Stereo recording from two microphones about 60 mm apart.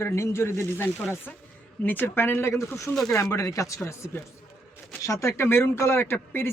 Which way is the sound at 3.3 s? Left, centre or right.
Left.